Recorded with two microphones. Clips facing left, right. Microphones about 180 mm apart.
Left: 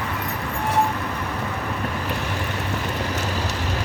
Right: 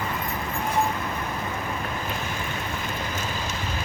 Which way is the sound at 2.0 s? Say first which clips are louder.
Left 4 dB; 70° left (ahead or behind).